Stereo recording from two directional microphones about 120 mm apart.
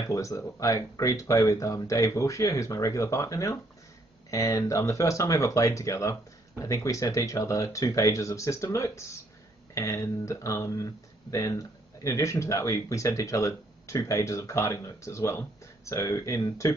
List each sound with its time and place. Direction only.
0.0 s speech: 25° left (ahead or behind)